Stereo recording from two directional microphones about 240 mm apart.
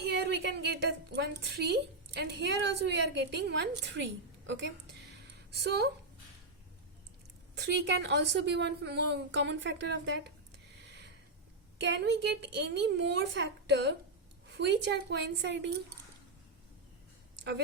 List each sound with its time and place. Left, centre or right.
0.0 s a woman's voice: right
5.1 s a sound: right
7.5 s a woman's voice: right
11.8 s a woman's voice: right